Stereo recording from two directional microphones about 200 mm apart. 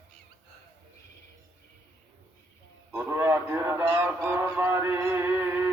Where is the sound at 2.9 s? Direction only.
10° right (ahead or behind).